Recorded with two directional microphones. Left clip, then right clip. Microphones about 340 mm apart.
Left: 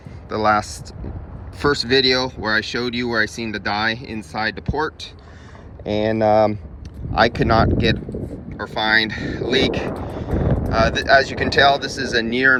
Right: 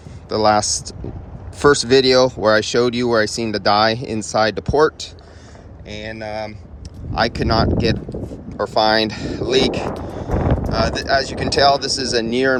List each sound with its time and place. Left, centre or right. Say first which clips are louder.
0.3 s speech: right 3 dB; centre
5.8 s speech: left 11 dB; centre
7.1 s speech: left 2 dB; centre